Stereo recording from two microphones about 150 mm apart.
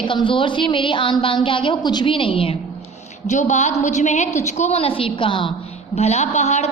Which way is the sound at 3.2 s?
50° left (ahead or behind).